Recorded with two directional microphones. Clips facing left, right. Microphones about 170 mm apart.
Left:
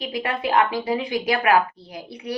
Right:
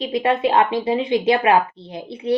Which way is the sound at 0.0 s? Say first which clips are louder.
Right 7 dB; 25° right (ahead or behind).